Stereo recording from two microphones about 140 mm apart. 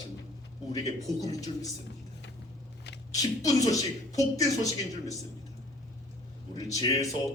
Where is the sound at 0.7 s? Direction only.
25° left (ahead or behind).